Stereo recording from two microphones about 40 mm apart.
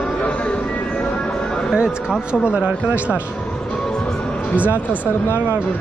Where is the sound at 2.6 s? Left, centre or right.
Right.